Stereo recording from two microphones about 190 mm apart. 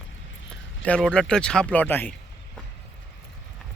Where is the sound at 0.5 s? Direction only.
5° left (ahead or behind).